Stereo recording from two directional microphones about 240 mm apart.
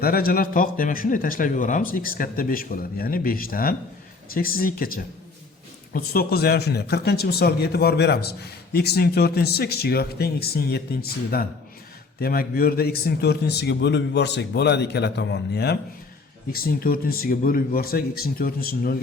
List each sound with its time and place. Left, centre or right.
0.0 s a man's voice: left